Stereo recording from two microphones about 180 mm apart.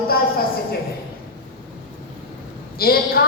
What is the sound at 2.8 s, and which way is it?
Speech, 55° left (ahead or behind).